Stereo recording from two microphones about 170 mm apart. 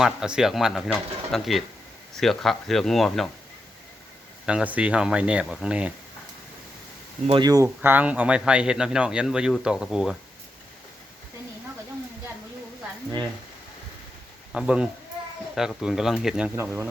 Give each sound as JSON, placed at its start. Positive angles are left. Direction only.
{"t": 0.0, "sound": "a man's voice", "side_deg": -5}
{"t": 4.4, "sound": "speech", "side_deg": -5}
{"t": 7.3, "sound": "speech", "side_deg": -25}
{"t": 7.8, "sound": "a man's voice", "side_deg": -10}
{"t": 14.5, "sound": "a man's voice", "side_deg": -5}